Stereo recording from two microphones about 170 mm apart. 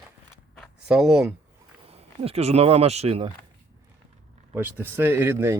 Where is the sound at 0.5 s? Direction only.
Centre (ahead or behind).